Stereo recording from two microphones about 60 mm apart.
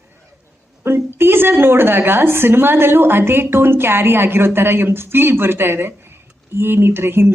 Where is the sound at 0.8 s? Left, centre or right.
Right.